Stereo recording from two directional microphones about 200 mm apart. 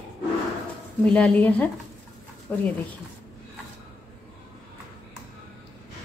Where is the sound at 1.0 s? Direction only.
5° left (ahead or behind).